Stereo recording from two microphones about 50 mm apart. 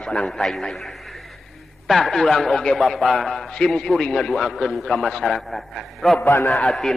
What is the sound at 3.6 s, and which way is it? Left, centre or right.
A man's voice, centre.